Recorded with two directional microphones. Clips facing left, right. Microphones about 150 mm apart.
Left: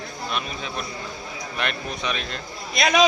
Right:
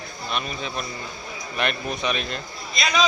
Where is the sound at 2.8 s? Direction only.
55° left (ahead or behind).